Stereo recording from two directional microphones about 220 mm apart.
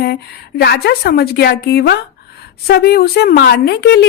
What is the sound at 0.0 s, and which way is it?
A woman's voice, 45° left (ahead or behind).